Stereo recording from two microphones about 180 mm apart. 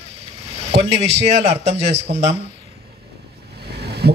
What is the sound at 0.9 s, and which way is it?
A man's voice, 35° right (ahead or behind).